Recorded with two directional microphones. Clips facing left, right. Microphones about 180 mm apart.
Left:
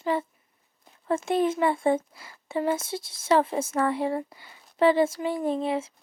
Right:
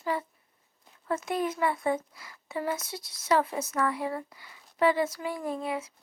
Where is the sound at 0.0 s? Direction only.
25° left (ahead or behind).